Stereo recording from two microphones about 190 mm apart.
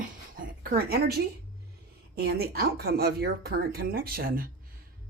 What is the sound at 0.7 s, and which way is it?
A woman's voice, 55° right (ahead or behind).